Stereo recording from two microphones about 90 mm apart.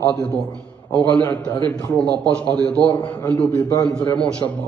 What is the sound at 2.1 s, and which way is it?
Speech, 50° right (ahead or behind).